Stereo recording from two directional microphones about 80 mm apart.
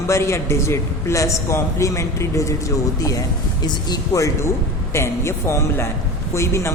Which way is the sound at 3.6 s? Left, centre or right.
Left.